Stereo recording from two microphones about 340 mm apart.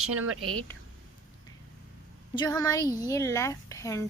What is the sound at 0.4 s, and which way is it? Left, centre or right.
Speech, centre.